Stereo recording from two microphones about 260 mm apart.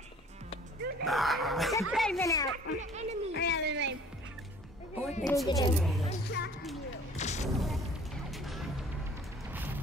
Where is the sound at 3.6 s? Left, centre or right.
Right.